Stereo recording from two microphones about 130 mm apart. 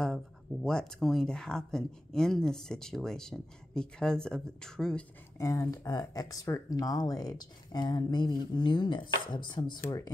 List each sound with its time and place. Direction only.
0.0 s speech: 5° left (ahead or behind)
5.4 s speech: 25° left (ahead or behind)